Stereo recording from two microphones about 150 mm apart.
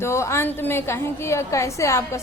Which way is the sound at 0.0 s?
20° left (ahead or behind).